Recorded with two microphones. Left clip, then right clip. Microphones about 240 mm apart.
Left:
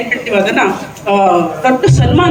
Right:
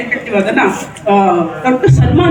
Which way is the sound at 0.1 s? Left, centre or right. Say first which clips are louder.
Left 1 dB; centre.